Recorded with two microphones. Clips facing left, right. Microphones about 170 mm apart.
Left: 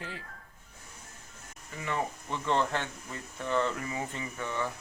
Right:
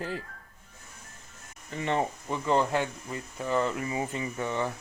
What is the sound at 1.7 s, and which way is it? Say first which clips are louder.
Speech: right 5 dB; 25° right (ahead or behind).